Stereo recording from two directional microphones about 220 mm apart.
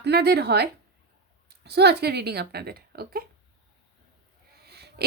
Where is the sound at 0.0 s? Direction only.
50° right (ahead or behind).